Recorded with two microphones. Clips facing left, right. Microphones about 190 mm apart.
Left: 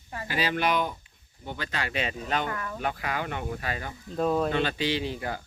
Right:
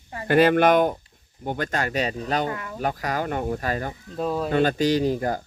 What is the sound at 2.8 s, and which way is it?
Speech, 40° right (ahead or behind).